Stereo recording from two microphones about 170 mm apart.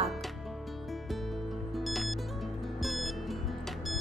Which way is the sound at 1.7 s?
Centre (ahead or behind).